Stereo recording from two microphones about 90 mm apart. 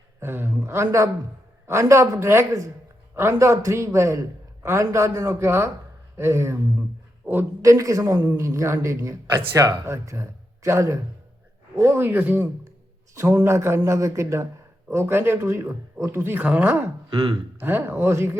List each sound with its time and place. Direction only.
0.2 s a man's voice: 25° right (ahead or behind)
7.6 s a man's voice: 35° right (ahead or behind)
17.1 s speech: 60° right (ahead or behind)
17.6 s speech: 25° right (ahead or behind)